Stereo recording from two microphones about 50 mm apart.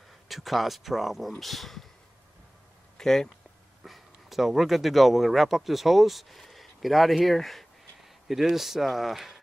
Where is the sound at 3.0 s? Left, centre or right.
Centre.